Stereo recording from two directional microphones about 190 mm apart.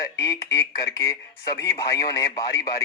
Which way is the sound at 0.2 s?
20° left (ahead or behind).